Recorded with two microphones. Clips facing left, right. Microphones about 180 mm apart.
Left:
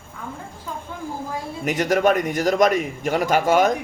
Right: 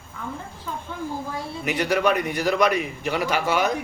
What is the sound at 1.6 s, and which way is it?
A man's voice, 45° left (ahead or behind).